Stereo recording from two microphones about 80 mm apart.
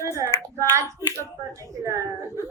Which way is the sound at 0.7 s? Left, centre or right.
Right.